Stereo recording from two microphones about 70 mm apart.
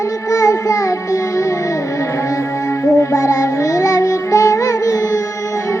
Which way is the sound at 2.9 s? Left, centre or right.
Left.